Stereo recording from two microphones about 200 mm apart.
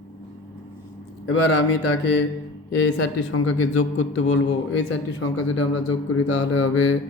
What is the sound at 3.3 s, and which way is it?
Mantra, 90° left.